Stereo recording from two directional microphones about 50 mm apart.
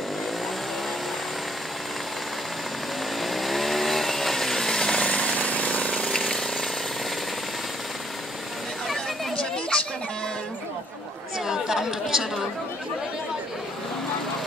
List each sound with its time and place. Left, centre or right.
3.2 s chainsaw: centre
5.0 s vehicle: left
6.0 s a sound: centre
8.8 s chatter: centre
9.4 s a sound: left
11.3 s chatter: centre